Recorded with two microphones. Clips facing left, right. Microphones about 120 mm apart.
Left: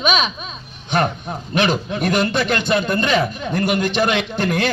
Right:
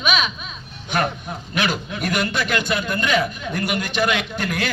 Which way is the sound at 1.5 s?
25° left (ahead or behind).